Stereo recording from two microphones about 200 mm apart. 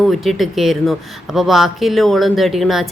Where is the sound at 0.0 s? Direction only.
Centre (ahead or behind).